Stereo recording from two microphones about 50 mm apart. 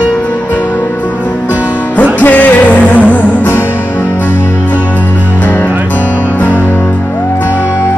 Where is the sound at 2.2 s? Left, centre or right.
Left.